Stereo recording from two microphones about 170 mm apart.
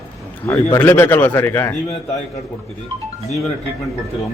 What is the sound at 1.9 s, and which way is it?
Speech, 40° left (ahead or behind).